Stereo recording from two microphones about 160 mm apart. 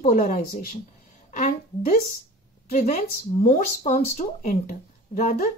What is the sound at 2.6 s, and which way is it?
Speech, 50° left (ahead or behind).